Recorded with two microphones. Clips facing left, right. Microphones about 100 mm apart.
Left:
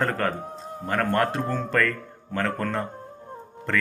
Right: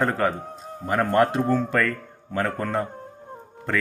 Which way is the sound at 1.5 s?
5° right (ahead or behind).